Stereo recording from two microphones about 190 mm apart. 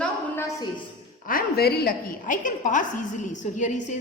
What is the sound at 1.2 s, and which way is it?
A woman's voice, 50° left (ahead or behind).